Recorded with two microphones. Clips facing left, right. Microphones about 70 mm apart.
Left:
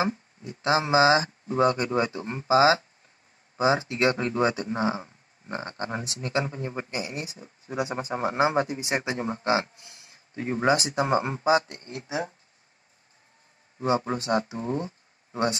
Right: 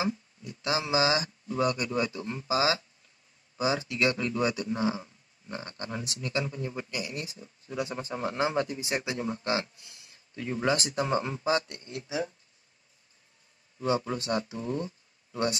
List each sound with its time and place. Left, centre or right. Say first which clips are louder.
0.0 s speech: left 4 dB; left
13.7 s speech: left 3 dB; left